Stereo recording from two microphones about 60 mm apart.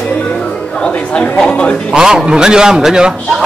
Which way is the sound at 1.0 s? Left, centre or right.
Centre.